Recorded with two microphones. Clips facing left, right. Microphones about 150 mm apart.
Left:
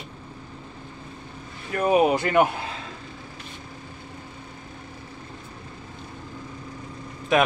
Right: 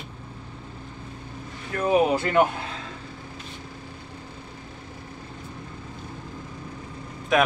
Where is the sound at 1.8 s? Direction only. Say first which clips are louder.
Left 1 dB; 15° left (ahead or behind).